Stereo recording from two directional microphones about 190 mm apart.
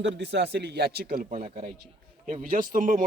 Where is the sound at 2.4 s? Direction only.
45° right (ahead or behind).